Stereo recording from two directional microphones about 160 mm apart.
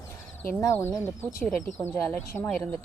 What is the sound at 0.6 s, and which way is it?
Speech, 15° left (ahead or behind).